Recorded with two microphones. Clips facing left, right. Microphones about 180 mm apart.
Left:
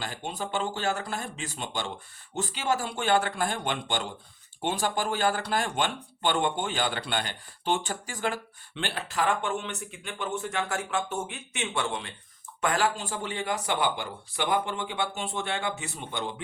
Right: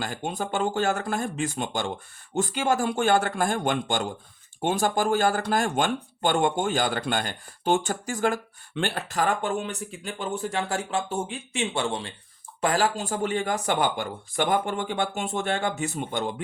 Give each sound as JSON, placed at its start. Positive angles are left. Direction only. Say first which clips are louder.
{"t": 0.0, "sound": "speech", "louder": "right 4 dB", "side_deg": -50}